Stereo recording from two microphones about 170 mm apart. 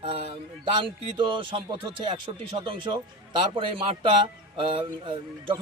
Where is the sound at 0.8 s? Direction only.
30° right (ahead or behind).